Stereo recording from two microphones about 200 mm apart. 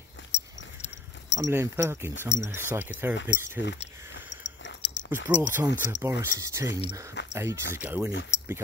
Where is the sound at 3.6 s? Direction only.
65° left (ahead or behind).